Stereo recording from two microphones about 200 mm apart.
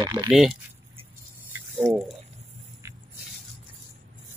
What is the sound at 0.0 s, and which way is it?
Speech, 20° right (ahead or behind).